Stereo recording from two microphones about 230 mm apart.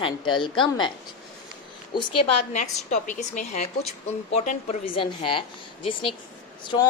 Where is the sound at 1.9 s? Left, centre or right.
Left.